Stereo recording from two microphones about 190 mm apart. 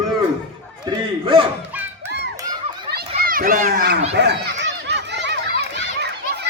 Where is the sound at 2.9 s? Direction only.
60° right (ahead or behind).